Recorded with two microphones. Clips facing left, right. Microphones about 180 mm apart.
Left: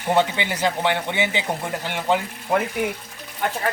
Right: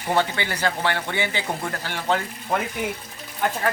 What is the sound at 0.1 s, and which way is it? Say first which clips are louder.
Speech: left 3 dB; 15° left (ahead or behind).